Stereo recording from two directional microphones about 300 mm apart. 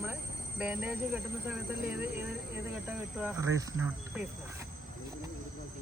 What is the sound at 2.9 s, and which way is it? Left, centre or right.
Speech, centre.